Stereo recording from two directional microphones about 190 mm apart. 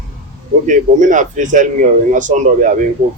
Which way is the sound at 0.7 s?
40° right (ahead or behind).